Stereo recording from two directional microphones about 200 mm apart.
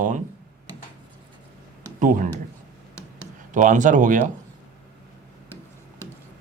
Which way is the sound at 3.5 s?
40° right (ahead or behind).